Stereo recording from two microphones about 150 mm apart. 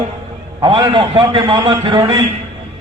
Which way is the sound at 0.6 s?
30° right (ahead or behind).